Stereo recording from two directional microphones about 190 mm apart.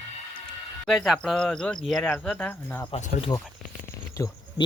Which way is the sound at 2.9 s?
25° left (ahead or behind).